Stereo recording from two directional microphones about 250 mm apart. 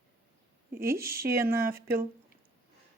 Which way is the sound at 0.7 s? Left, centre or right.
Centre.